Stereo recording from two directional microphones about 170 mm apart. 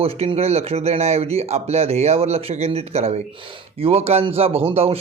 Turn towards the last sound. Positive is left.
turn(degrees=-35)  # may be behind; listen again after turning